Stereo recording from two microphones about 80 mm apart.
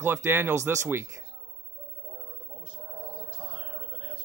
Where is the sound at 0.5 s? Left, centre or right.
Right.